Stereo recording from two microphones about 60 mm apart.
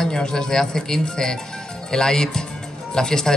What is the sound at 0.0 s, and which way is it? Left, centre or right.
A man's voice, centre.